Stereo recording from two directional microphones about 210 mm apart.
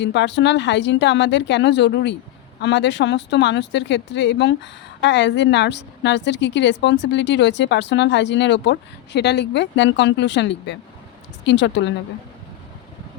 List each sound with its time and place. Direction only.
0.0 s speech: 55° left (ahead or behind)